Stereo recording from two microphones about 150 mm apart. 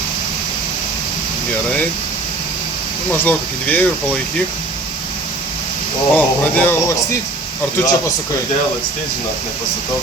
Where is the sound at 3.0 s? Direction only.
10° left (ahead or behind).